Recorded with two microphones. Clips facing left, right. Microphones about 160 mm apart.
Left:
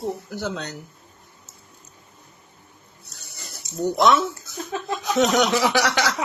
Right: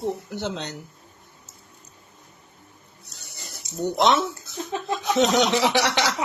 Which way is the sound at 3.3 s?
20° right (ahead or behind).